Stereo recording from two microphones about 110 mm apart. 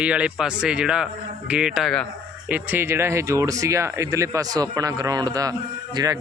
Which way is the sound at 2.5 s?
20° right (ahead or behind).